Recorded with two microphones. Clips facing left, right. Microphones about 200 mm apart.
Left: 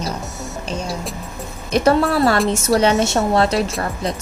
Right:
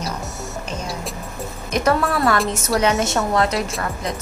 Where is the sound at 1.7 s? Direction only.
30° left (ahead or behind).